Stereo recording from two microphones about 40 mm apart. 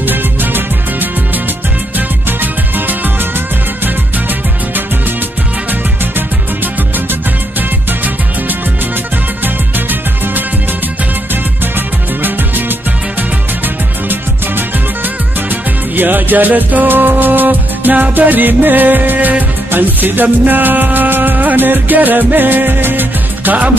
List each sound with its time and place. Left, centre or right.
0.0 s music: right
2.0 s music: right
9.8 s music: right
12.2 s music: right
16.0 s music: right